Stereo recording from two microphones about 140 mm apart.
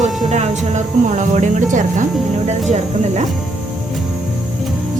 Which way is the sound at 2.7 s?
55° right (ahead or behind).